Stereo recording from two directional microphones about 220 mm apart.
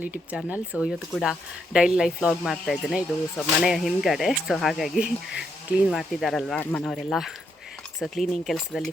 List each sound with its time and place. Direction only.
0.0 s speech: 5° right (ahead or behind)